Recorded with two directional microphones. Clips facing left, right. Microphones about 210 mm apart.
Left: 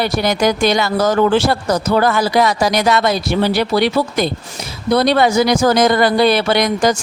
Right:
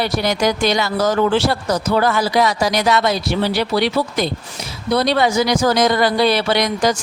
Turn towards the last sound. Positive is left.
turn(degrees=50)  # may be behind; listen again after turning